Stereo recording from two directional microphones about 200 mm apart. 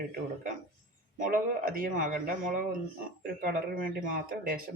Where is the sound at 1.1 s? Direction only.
45° right (ahead or behind).